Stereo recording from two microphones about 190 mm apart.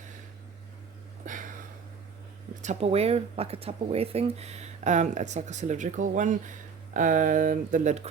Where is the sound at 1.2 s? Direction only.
45° right (ahead or behind).